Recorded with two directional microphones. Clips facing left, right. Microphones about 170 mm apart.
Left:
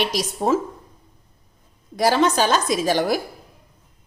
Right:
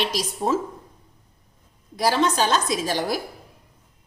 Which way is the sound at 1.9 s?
55° left (ahead or behind).